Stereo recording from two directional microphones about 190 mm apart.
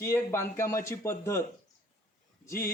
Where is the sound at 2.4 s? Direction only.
15° left (ahead or behind).